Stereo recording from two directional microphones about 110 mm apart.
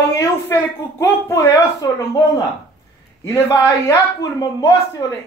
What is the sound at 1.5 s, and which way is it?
A man's voice, 35° left (ahead or behind).